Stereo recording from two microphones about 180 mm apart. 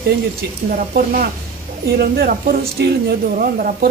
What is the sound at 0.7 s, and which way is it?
A woman's voice, 55° right (ahead or behind).